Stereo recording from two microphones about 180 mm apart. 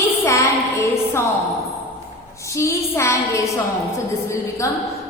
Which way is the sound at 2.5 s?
15° left (ahead or behind).